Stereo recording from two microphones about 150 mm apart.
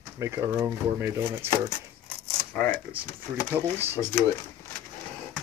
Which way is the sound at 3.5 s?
15° right (ahead or behind).